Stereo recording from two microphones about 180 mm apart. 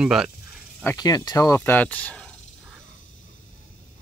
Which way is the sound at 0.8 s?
20° left (ahead or behind).